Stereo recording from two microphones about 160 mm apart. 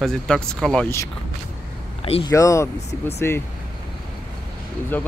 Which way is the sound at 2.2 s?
20° left (ahead or behind).